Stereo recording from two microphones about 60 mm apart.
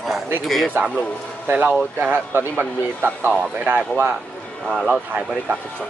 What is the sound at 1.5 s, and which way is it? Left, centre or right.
A man's voice, right.